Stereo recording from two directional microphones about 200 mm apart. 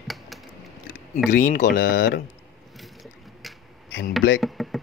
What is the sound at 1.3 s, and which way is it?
Speech, 40° left (ahead or behind).